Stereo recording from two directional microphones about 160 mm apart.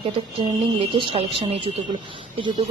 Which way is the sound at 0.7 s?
35° right (ahead or behind).